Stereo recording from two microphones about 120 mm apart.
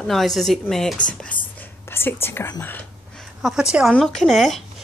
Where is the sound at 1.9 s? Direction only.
20° left (ahead or behind).